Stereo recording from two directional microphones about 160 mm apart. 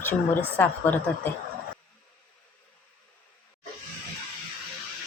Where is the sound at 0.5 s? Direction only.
10° left (ahead or behind).